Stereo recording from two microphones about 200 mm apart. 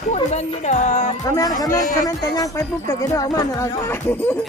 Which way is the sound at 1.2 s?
15° left (ahead or behind).